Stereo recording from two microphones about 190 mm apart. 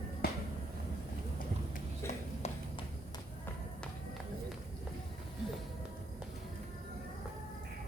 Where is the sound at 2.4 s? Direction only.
35° left (ahead or behind).